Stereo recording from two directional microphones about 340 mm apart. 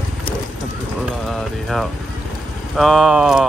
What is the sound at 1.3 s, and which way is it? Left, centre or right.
Speech, centre.